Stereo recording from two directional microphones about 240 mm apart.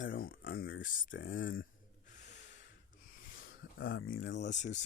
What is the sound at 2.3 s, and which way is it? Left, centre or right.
Snort, left.